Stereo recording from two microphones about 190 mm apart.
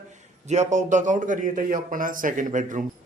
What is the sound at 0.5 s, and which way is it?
A man's voice, 40° right (ahead or behind).